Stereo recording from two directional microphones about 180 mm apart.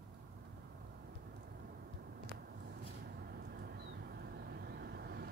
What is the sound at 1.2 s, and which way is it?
Vehicle, 60° right (ahead or behind).